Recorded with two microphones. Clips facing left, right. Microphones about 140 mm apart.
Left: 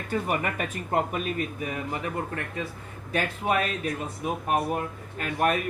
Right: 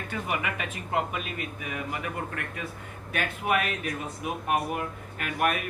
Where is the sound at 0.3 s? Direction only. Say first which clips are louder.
Left 3 dB; 40° left (ahead or behind).